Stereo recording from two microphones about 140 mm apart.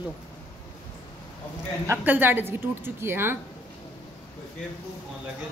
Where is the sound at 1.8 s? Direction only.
15° right (ahead or behind).